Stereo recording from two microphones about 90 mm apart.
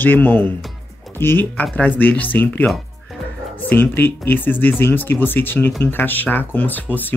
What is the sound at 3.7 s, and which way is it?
Speech, 20° left (ahead or behind).